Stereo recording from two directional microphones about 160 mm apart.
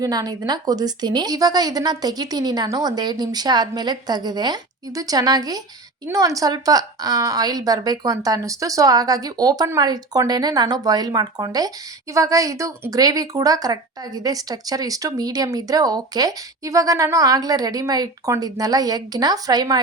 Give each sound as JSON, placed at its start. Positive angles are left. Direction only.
{"t": 0.0, "sound": "a woman's voice", "side_deg": -25}